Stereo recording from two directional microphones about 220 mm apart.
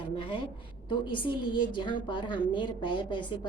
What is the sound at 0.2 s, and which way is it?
A woman's voice, 25° left (ahead or behind).